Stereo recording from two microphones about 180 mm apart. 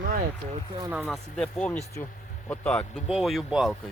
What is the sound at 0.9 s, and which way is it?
Speech, 5° right (ahead or behind).